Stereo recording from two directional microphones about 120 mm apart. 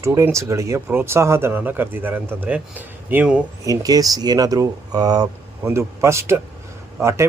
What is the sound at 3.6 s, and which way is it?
Speech, 30° right (ahead or behind).